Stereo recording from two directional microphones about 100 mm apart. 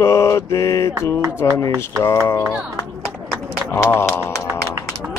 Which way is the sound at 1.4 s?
35° left (ahead or behind).